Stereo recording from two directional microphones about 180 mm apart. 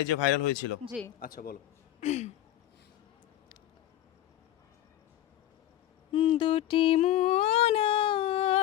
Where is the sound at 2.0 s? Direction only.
40° left (ahead or behind).